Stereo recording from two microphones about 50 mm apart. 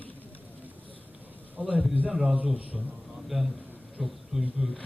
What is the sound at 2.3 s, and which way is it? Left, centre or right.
Speech, right.